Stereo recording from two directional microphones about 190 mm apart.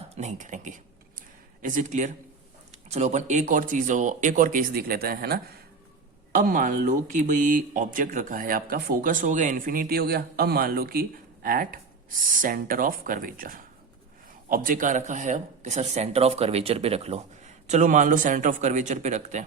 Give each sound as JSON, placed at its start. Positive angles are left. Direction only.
{"t": 0.1, "sound": "speech", "side_deg": -35}